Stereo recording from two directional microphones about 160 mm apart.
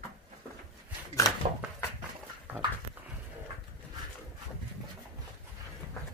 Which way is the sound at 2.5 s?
10° right (ahead or behind).